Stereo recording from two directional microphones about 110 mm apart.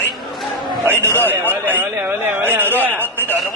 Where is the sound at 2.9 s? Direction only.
15° left (ahead or behind).